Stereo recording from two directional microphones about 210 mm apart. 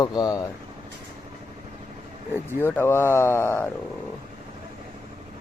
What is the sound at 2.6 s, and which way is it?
Speech, 10° left (ahead or behind).